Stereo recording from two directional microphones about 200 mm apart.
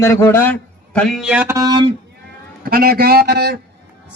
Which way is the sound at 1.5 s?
20° right (ahead or behind).